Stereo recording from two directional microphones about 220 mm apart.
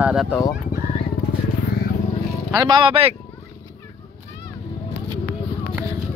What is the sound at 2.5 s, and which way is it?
Speech, 20° right (ahead or behind).